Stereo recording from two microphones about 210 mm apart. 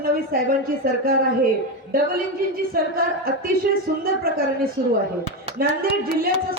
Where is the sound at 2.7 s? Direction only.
45° right (ahead or behind).